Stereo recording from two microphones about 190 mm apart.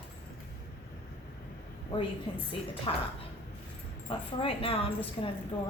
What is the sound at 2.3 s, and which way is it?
Speech, 25° left (ahead or behind).